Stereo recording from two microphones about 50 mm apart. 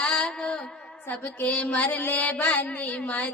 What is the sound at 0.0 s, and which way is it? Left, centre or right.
Mantra, centre.